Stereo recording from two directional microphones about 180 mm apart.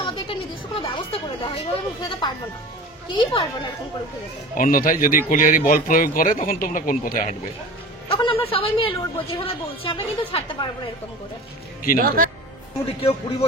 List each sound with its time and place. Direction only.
0.0 s speech: 30° left (ahead or behind)
4.6 s speech: 50° left (ahead or behind)
8.1 s a woman's voice: 30° left (ahead or behind)
12.8 s a woman's voice: 35° left (ahead or behind)